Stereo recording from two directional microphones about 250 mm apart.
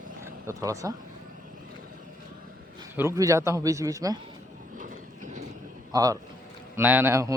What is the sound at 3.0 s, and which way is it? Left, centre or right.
A man's voice, centre.